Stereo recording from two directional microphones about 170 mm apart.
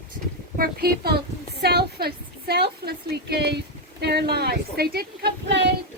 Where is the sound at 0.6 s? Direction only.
65° right (ahead or behind); by 5.6 s 80° right.